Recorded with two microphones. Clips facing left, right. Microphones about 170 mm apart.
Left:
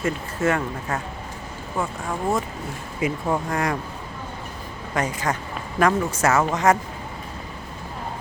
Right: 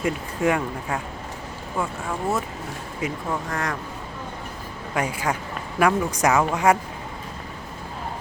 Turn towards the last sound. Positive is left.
turn(degrees=-10)  # may be behind; listen again after turning